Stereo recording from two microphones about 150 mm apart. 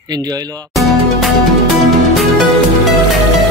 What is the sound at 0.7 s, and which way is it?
Music, centre (ahead or behind).